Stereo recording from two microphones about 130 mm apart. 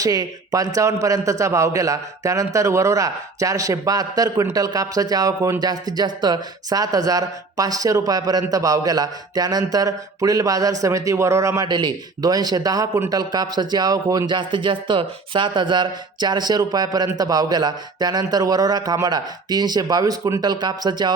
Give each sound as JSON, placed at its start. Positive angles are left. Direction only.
{"t": 0.0, "sound": "a man's voice", "side_deg": -30}
{"t": 11.7, "sound": "a man's voice", "side_deg": -35}